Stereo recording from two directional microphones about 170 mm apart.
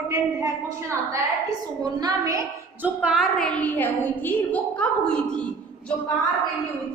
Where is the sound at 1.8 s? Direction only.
25° right (ahead or behind).